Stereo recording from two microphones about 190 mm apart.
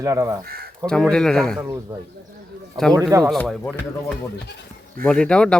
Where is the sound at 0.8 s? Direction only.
5° left (ahead or behind).